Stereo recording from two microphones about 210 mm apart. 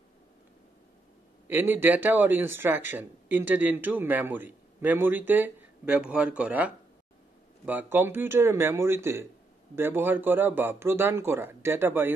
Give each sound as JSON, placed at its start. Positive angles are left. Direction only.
{"t": 1.5, "sound": "speech", "side_deg": -10}